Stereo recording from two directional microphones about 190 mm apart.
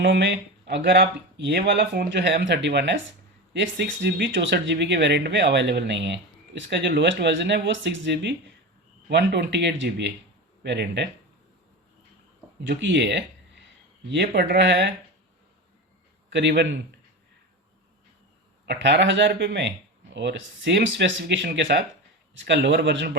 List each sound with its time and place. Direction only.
0.0 s speech: 65° right (ahead or behind)
12.6 s speech: 65° right (ahead or behind)
16.3 s speech: 65° right (ahead or behind)
18.6 s speech: 65° right (ahead or behind)